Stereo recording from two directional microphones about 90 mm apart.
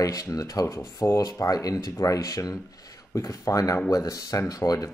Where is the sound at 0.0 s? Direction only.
40° left (ahead or behind).